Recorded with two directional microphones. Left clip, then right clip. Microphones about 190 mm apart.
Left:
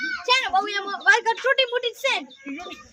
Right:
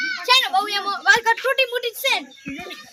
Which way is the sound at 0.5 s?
15° left (ahead or behind).